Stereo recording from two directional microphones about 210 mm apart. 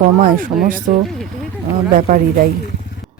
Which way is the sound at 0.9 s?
40° right (ahead or behind).